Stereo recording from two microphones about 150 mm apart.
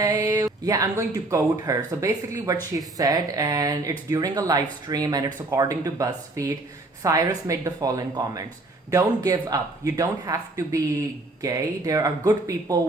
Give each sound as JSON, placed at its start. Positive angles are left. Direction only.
{"t": 0.0, "sound": "speech", "side_deg": -25}